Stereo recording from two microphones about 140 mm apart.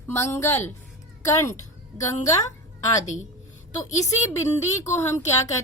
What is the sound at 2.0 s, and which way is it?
Speech, 25° left (ahead or behind).